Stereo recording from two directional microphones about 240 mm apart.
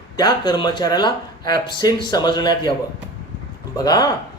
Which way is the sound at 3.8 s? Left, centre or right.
Centre.